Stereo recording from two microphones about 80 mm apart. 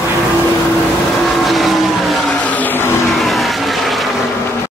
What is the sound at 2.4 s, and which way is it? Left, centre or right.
Vehicle, left.